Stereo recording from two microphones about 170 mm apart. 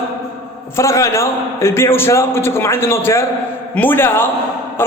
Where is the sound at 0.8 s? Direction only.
15° left (ahead or behind).